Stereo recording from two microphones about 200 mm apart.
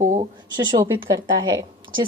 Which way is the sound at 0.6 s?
20° right (ahead or behind).